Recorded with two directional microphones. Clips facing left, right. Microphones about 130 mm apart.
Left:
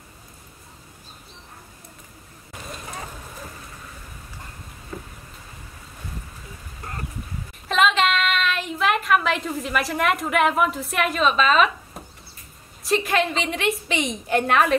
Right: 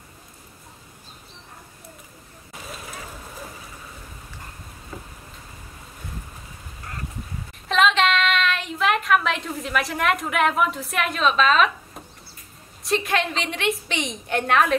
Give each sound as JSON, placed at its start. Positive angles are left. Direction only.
{"t": 7.6, "sound": "a woman's voice", "side_deg": 0}
{"t": 12.8, "sound": "a woman's voice", "side_deg": 0}